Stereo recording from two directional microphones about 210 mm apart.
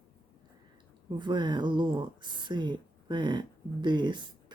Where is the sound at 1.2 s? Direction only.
20° right (ahead or behind).